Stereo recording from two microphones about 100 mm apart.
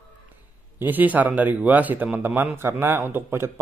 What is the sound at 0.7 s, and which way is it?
Speech, 20° right (ahead or behind).